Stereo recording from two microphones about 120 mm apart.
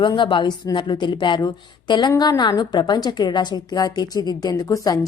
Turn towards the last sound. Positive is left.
turn(degrees=30)  # may be behind; listen again after turning